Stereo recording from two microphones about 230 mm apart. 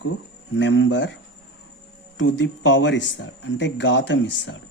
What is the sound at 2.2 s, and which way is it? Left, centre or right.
Speech, left.